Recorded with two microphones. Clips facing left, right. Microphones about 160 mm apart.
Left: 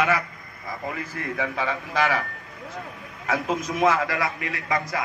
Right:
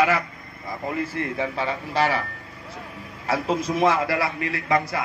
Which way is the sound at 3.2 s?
30° right (ahead or behind).